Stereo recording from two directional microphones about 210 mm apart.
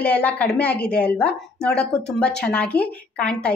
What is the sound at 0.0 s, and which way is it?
Speech, 5° left (ahead or behind).